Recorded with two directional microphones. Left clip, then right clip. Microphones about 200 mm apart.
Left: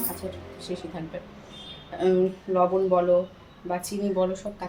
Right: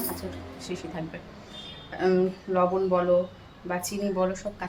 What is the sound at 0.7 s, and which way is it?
Speech, 10° left (ahead or behind).